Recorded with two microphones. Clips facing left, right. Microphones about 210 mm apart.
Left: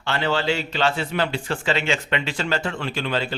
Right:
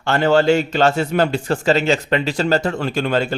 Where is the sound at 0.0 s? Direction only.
45° right (ahead or behind).